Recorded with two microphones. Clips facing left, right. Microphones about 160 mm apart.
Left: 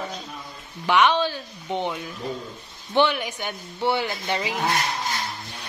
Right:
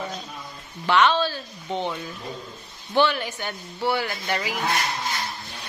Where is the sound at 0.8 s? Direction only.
15° left (ahead or behind).